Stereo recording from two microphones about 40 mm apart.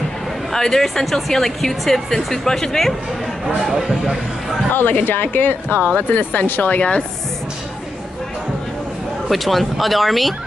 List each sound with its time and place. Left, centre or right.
0.5 s speech: centre
3.4 s speech: centre
5.0 s speech: left
9.3 s speech: centre